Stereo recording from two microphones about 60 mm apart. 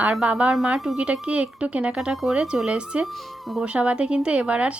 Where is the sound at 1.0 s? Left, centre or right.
Centre.